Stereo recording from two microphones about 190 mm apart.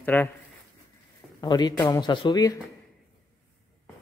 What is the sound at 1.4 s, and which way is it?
Speech, 20° left (ahead or behind).